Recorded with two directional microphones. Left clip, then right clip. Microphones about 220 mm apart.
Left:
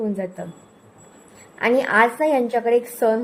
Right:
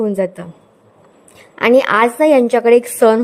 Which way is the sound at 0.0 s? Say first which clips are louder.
Right 9 dB; 40° right (ahead or behind).